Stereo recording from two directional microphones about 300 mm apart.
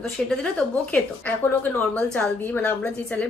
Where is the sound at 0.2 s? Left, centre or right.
Centre.